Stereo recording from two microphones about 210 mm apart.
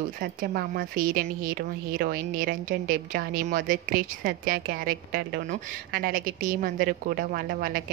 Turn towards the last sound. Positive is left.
turn(degrees=-45)  # may be behind; listen again after turning